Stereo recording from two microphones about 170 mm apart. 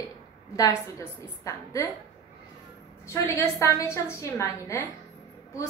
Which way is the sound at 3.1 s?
15° left (ahead or behind).